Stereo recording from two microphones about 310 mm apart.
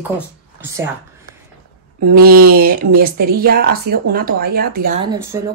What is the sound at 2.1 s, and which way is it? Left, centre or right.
A woman's voice, right.